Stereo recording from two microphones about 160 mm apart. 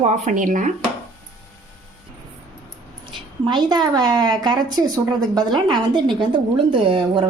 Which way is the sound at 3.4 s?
30° right (ahead or behind).